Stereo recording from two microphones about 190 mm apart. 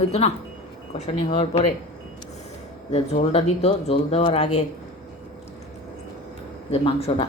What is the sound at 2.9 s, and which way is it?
Speech, 35° left (ahead or behind).